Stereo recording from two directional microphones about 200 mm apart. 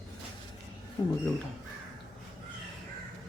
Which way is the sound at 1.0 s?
20° left (ahead or behind).